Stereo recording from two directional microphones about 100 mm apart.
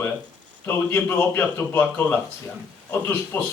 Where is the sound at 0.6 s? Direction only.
20° left (ahead or behind).